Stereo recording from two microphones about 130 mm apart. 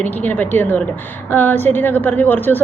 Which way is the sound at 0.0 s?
15° left (ahead or behind).